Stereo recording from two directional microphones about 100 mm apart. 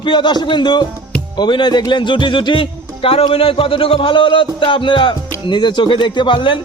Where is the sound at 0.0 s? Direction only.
50° left (ahead or behind).